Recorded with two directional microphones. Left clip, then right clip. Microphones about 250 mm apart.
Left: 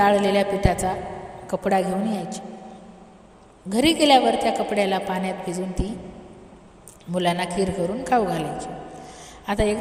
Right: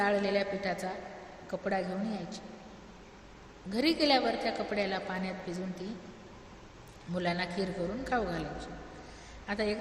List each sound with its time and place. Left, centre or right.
0.0 s a woman's voice: left
3.7 s a woman's voice: left
7.2 s a woman's voice: left